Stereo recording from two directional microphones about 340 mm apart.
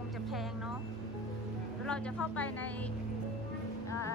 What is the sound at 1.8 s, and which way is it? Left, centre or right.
Speech, centre.